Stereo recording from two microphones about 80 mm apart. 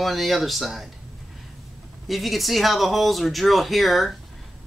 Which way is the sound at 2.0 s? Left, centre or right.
Centre.